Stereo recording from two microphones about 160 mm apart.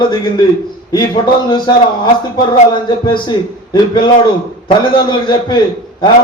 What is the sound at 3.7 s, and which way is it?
A man's voice, 25° left (ahead or behind).